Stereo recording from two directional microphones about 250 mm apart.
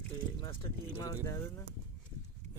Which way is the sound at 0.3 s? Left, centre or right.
Centre.